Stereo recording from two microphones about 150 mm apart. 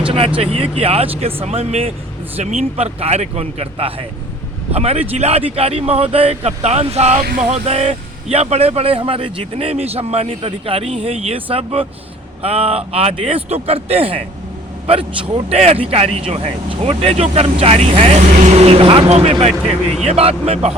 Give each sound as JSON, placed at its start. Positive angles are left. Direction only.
{"t": 0.0, "sound": "vehicle", "side_deg": -40}
{"t": 0.3, "sound": "speech", "side_deg": -40}
{"t": 7.2, "sound": "male singing", "side_deg": -70}
{"t": 7.4, "sound": "speech", "side_deg": -45}
{"t": 15.5, "sound": "speech", "side_deg": -45}